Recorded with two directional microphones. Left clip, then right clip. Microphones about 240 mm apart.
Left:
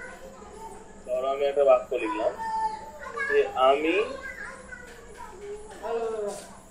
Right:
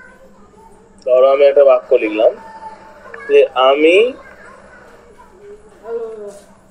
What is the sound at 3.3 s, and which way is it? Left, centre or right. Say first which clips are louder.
Speech: right 12 dB; right.